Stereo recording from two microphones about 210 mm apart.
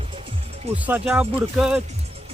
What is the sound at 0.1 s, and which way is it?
Music, 25° right (ahead or behind).